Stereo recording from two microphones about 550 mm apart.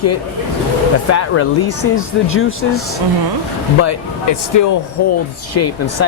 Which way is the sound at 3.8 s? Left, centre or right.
Left.